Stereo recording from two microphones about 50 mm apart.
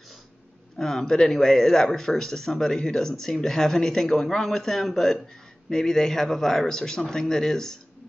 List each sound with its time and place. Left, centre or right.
0.7 s speech: centre